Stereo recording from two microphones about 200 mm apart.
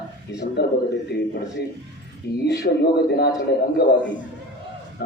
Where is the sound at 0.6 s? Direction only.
55° left (ahead or behind).